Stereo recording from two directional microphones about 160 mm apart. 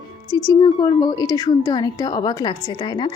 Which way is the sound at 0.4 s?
25° left (ahead or behind).